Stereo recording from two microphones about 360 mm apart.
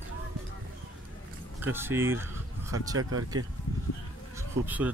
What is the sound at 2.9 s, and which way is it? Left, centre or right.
Speech, right.